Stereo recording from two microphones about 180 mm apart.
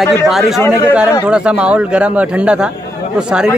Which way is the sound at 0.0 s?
Centre (ahead or behind).